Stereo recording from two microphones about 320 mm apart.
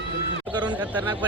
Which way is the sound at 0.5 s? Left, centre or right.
Centre.